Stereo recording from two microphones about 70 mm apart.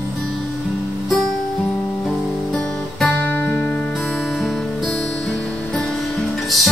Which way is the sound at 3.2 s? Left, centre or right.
Left.